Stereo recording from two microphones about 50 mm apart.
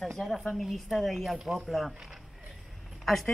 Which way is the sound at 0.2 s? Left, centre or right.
Centre.